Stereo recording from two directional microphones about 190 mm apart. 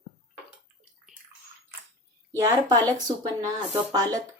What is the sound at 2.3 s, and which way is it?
Speech, 20° right (ahead or behind).